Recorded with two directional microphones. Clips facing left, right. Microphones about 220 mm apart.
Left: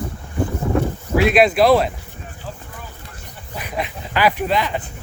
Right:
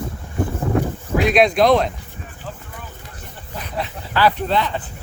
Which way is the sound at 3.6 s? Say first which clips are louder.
Left 1 dB; 10° left (ahead or behind).